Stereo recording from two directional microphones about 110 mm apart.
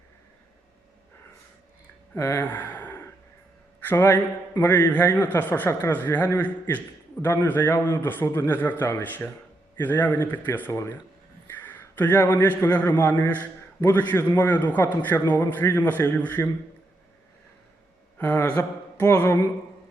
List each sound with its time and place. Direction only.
2.1 s gasp: 25° left (ahead or behind)
3.8 s a man's voice: 20° left (ahead or behind)
11.4 s a sound: 15° left (ahead or behind)
12.5 s a man's voice: 15° left (ahead or behind)
18.2 s speech: 15° left (ahead or behind)